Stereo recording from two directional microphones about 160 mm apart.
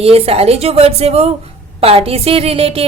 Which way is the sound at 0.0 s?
40° right (ahead or behind).